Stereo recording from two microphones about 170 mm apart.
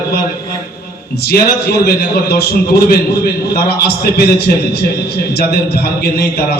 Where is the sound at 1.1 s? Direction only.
70° left (ahead or behind).